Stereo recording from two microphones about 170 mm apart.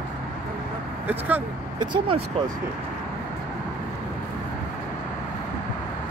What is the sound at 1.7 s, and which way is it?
Speech, 30° right (ahead or behind).